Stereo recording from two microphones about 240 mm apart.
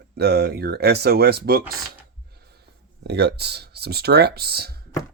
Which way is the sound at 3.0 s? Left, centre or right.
Right.